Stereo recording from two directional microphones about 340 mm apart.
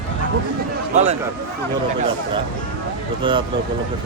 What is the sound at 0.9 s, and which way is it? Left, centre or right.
Speech, centre.